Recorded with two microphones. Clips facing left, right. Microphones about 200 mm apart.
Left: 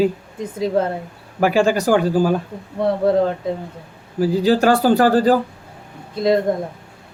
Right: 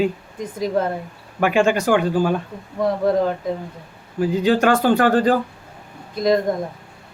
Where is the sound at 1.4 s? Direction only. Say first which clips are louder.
Left 1 dB; 35° left (ahead or behind).